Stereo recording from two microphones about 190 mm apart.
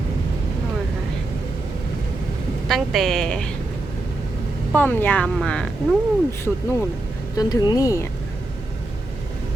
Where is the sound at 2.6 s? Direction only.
Centre (ahead or behind).